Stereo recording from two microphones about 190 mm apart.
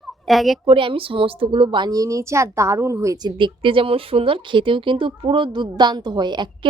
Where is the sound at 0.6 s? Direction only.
25° right (ahead or behind).